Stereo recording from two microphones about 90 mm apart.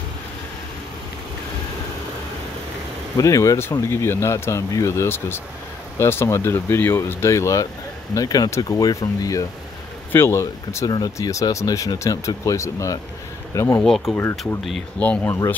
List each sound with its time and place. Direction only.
3.2 s speech: 35° left (ahead or behind)
10.1 s speech: 30° left (ahead or behind)
13.7 s speech: 5° left (ahead or behind)
15.0 s speech: 15° left (ahead or behind)